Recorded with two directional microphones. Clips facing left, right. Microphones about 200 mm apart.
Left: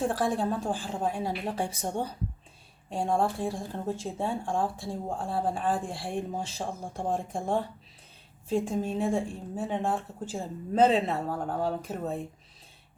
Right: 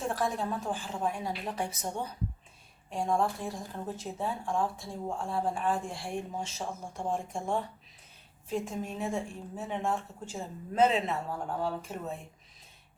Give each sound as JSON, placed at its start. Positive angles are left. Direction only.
{"t": 0.0, "sound": "speech", "side_deg": 30}